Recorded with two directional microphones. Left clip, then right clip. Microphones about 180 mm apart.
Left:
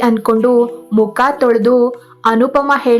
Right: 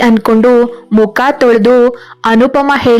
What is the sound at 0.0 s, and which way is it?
Speech, 25° right (ahead or behind).